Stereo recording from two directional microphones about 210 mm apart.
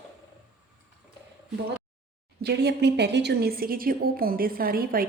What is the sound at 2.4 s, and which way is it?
A woman's voice, 50° right (ahead or behind).